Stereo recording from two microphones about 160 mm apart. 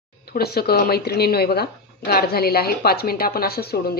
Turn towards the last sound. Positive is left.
turn(degrees=80)